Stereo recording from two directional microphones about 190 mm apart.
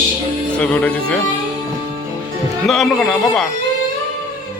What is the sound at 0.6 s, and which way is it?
Speech, 5° left (ahead or behind).